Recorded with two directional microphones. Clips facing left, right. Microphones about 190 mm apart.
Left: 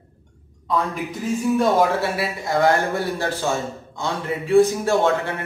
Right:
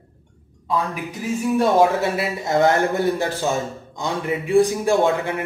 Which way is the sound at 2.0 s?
20° right (ahead or behind).